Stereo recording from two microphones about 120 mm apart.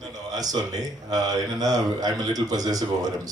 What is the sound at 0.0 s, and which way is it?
A man's voice, 30° right (ahead or behind).